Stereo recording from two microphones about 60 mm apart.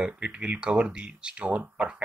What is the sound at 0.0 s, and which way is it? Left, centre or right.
Speech, centre.